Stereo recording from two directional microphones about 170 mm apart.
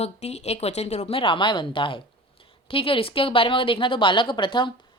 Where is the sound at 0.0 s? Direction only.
40° left (ahead or behind).